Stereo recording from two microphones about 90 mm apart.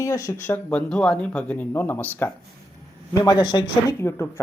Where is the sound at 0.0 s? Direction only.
35° left (ahead or behind).